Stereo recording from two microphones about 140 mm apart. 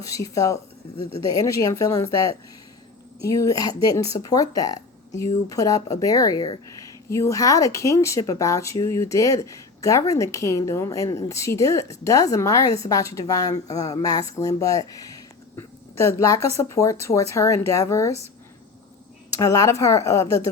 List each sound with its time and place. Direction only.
0.1 s speech: 25° left (ahead or behind)
19.3 s speech: 25° left (ahead or behind)